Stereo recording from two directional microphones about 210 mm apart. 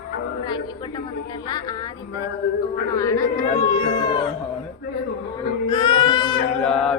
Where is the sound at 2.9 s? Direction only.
15° left (ahead or behind).